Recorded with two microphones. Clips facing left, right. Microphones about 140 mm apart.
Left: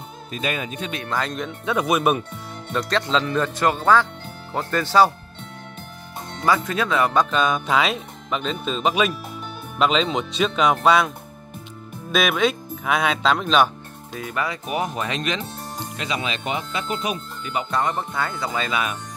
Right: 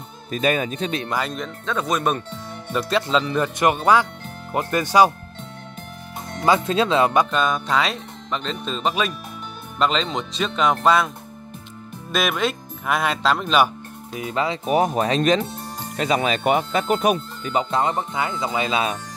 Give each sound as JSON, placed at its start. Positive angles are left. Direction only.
{"t": 0.3, "sound": "speech", "side_deg": -40}
{"t": 1.1, "sound": "speech", "side_deg": -5}
{"t": 1.7, "sound": "speech", "side_deg": 10}
{"t": 2.7, "sound": "speech", "side_deg": -5}
{"t": 6.4, "sound": "speech", "side_deg": -25}
{"t": 7.2, "sound": "speech", "side_deg": 0}
{"t": 12.1, "sound": "speech", "side_deg": 0}
{"t": 14.1, "sound": "speech", "side_deg": -20}
{"t": 14.7, "sound": "speech", "side_deg": -40}
{"t": 17.4, "sound": "speech", "side_deg": -35}
{"t": 17.6, "sound": "speech", "side_deg": -25}